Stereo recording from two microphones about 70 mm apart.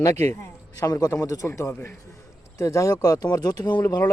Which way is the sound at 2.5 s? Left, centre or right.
Left.